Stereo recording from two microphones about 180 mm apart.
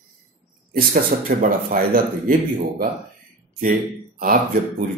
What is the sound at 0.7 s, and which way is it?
Speech, 50° right (ahead or behind).